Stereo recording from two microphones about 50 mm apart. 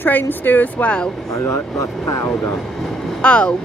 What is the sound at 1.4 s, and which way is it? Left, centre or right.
Speech, left.